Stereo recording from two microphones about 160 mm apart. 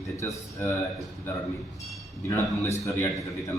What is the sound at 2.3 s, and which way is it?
Speech, 20° left (ahead or behind).